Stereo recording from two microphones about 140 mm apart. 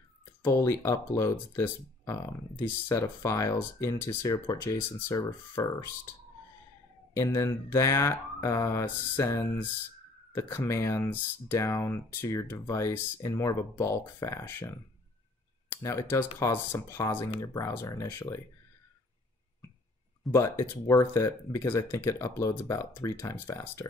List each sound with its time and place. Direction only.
0.4 s speech: 20° left (ahead or behind)
7.2 s speech: 20° left (ahead or behind)
15.8 s speech: 20° left (ahead or behind)
20.2 s speech: 25° left (ahead or behind)